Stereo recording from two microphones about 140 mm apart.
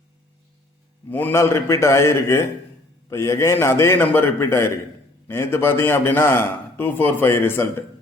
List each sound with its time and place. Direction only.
1.1 s a man's voice: 15° left (ahead or behind)